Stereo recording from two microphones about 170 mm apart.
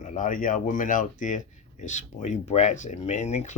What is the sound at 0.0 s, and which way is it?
Speech, 50° left (ahead or behind).